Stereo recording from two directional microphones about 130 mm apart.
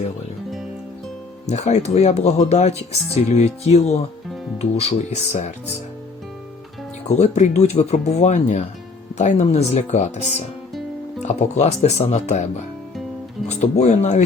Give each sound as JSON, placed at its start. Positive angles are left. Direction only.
{"t": 1.5, "sound": "speech", "side_deg": 60}
{"t": 7.2, "sound": "speech", "side_deg": 60}
{"t": 13.5, "sound": "speech", "side_deg": 60}